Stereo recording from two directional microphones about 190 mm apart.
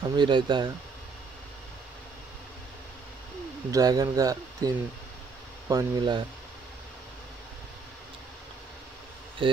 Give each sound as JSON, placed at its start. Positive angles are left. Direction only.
{"t": 0.0, "sound": "speech", "side_deg": -25}
{"t": 3.7, "sound": "speech", "side_deg": -20}
{"t": 9.4, "sound": "speech", "side_deg": -25}